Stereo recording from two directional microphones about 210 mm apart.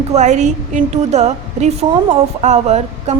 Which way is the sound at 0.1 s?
35° right (ahead or behind).